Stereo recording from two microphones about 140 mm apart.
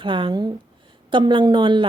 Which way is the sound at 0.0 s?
35° right (ahead or behind).